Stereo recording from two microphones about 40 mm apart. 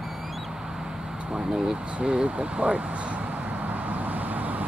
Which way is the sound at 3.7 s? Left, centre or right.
Right.